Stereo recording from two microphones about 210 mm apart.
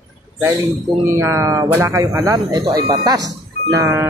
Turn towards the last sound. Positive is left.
turn(degrees=-15)  # may be behind; listen again after turning